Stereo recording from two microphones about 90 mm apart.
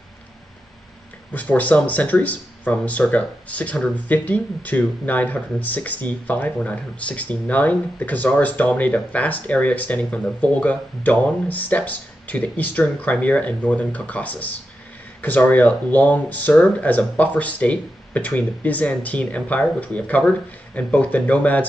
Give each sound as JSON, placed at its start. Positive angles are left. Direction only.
{"t": 1.3, "sound": "speech", "side_deg": 15}